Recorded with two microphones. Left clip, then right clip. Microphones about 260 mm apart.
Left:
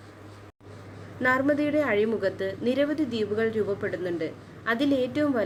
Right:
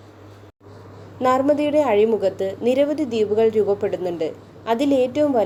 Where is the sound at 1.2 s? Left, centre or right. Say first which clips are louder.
Right 6 dB; centre.